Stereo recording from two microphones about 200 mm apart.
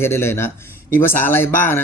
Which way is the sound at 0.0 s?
10° left (ahead or behind).